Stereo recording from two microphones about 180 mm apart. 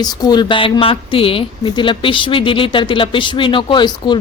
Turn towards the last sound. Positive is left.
turn(degrees=25)  # may be behind; listen again after turning